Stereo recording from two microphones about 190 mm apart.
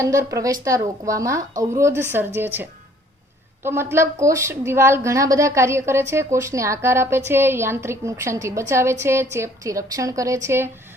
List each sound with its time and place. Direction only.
0.0 s a woman's voice: 15° right (ahead or behind)